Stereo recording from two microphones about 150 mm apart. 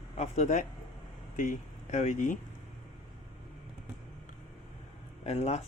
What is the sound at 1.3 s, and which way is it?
Speech, 60° left (ahead or behind).